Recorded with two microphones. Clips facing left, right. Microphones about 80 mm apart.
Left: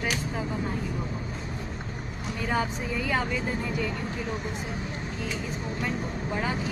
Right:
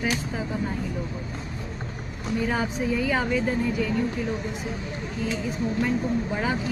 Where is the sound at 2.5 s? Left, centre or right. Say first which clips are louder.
Left 1 dB; centre.